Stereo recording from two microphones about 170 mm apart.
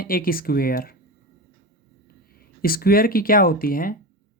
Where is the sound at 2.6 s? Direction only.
60° left (ahead or behind).